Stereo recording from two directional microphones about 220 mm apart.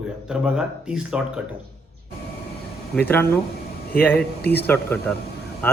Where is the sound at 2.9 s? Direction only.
10° left (ahead or behind).